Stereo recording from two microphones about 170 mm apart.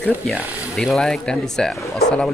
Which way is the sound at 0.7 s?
5° left (ahead or behind).